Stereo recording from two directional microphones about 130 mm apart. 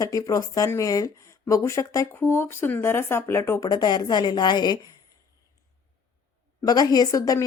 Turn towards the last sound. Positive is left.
turn(degrees=25)  # may be behind; listen again after turning